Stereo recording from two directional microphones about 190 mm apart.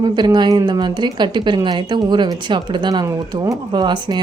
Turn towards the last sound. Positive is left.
turn(degrees=-25)  # may be behind; listen again after turning